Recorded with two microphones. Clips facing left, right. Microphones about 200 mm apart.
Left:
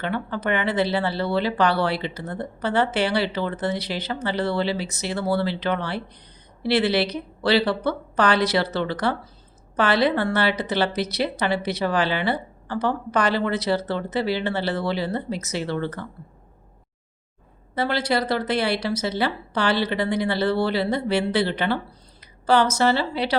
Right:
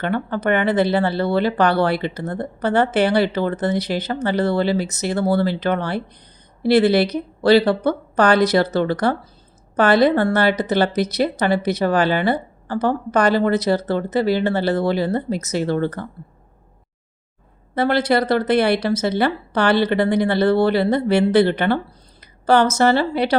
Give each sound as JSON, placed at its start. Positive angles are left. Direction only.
{"t": 0.0, "sound": "a woman's voice", "side_deg": -50}
{"t": 17.7, "sound": "a woman's voice", "side_deg": -55}
{"t": 22.2, "sound": "a sound", "side_deg": -50}
{"t": 22.8, "sound": "a woman's voice", "side_deg": -50}